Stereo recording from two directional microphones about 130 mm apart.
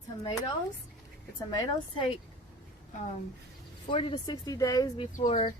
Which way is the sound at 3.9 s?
40° left (ahead or behind).